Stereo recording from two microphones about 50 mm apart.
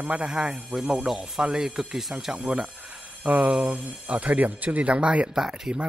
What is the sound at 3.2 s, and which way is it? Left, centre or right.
Jingle bell, right.